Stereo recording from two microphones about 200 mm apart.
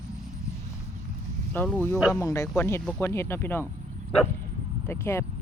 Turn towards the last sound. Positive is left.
turn(degrees=15)  # may be behind; listen again after turning